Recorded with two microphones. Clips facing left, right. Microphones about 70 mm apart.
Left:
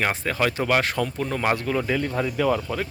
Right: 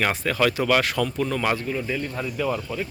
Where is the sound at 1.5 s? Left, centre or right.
Left.